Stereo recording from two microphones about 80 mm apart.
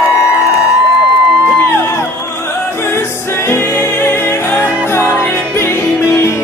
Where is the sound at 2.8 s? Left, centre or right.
Left.